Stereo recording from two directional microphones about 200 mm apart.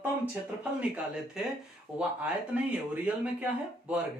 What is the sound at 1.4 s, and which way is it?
Speech, 5° right (ahead or behind).